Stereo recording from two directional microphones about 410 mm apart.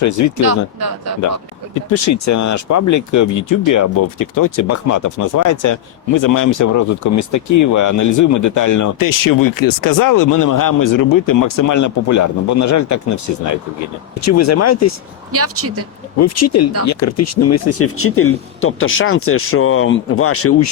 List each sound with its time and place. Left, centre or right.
0.0 s speech: left
0.4 s speech: right
1.9 s speech: left
15.3 s speech: right
16.1 s speech: left